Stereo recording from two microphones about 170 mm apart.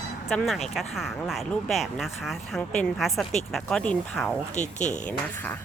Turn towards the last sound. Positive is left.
turn(degrees=45)  # may be behind; listen again after turning